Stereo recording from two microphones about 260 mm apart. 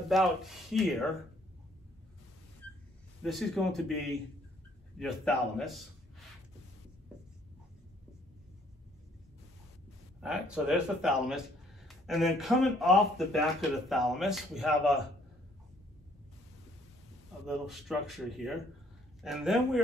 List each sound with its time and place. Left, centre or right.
0.1 s speech: centre
3.2 s a man's voice: centre
10.2 s speech: centre
17.5 s speech: centre